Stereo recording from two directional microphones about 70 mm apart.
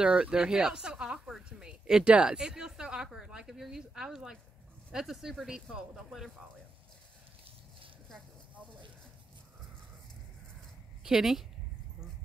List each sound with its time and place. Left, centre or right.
0.0 s a woman's voice: centre
11.1 s speech: centre